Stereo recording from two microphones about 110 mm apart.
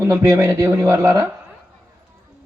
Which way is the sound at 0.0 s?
30° right (ahead or behind).